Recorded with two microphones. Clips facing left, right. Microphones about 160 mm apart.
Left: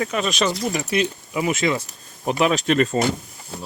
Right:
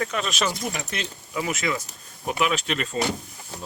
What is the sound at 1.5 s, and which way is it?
Speech, 25° left (ahead or behind).